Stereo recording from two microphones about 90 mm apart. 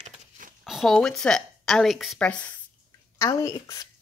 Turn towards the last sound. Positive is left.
turn(degrees=40)  # may be behind; listen again after turning